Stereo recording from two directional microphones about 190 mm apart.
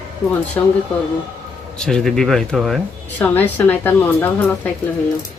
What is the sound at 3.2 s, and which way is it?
Speech, 10° left (ahead or behind).